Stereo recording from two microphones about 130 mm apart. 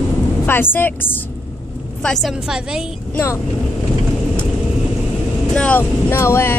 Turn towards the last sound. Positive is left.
turn(degrees=20)  # may be behind; listen again after turning